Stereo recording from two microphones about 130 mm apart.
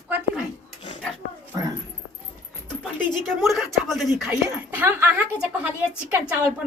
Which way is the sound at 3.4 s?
Centre (ahead or behind).